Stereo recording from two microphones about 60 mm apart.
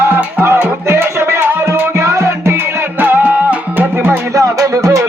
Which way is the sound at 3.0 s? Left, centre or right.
Right.